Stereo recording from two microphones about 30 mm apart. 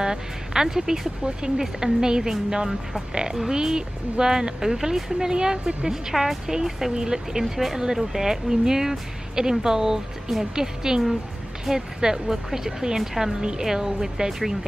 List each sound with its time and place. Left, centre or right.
0.0 s speech: right
5.9 s speech: centre
6.5 s speech: right